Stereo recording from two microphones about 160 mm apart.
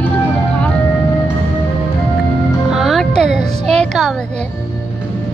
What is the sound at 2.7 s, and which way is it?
Music, centre (ahead or behind).